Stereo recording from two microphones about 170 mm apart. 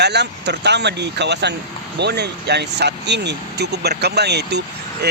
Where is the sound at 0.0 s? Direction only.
85° right.